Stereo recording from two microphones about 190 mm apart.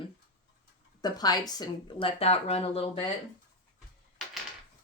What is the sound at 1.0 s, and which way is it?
Speech, 20° left (ahead or behind).